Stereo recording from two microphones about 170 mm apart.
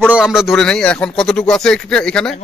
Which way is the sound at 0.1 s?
5° right (ahead or behind).